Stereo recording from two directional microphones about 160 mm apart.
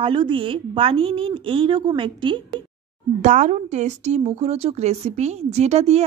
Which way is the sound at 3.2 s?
50° right (ahead or behind).